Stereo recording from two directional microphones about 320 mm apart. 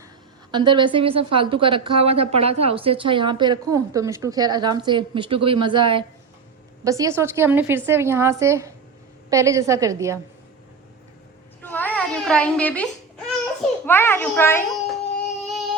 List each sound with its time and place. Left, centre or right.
0.5 s a woman's voice: centre
11.6 s baby cry: centre